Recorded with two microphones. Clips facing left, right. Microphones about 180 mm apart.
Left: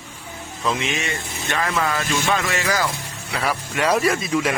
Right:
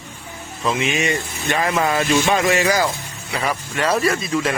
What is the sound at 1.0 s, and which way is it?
Speech, 15° right (ahead or behind).